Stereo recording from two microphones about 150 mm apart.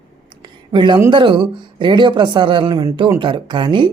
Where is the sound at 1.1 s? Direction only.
30° right (ahead or behind).